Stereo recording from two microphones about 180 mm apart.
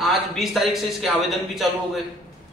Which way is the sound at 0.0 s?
Centre (ahead or behind).